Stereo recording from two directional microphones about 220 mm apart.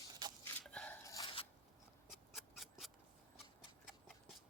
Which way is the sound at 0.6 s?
5° left (ahead or behind).